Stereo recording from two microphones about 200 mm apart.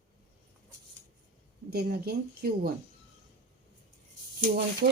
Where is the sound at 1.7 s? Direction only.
50° right (ahead or behind).